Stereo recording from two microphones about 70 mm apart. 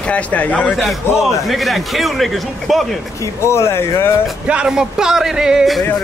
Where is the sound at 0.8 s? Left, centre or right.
Centre.